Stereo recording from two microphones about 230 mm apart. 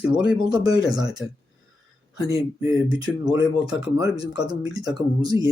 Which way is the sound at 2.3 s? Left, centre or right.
Centre.